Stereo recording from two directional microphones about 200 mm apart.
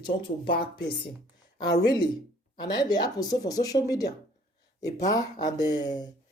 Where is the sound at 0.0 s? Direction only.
25° left (ahead or behind).